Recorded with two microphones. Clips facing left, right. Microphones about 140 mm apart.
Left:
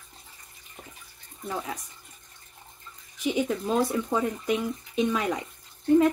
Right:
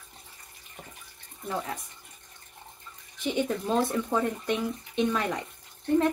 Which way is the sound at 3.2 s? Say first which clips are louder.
Left 1 dB; 5° left (ahead or behind).